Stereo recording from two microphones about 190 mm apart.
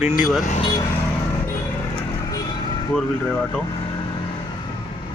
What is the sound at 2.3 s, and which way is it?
Vehicle, 20° left (ahead or behind).